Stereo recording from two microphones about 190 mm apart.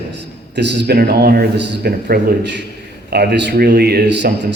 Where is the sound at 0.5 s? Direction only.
65° right (ahead or behind).